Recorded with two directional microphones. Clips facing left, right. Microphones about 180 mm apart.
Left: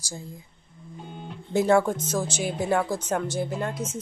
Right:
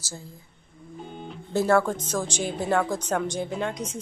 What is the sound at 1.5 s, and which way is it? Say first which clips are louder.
A woman's voice: left 1 dB; 15° left (ahead or behind).